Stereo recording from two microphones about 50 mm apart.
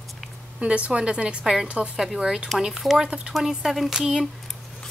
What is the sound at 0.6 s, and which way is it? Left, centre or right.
A woman's voice, right.